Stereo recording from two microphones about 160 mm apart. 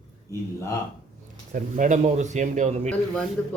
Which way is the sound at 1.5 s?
55° right (ahead or behind).